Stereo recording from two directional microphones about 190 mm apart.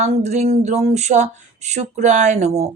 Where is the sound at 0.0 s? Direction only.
35° right (ahead or behind).